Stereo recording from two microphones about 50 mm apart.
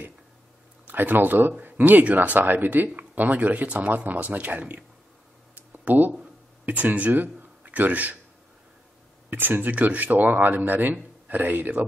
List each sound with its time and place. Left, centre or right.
0.8 s speech: right
5.5 s a sound: right
6.6 s speech: right
9.3 s speech: right